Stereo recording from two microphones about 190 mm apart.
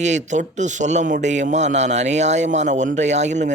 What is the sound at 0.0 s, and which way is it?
A man's voice, 40° right (ahead or behind).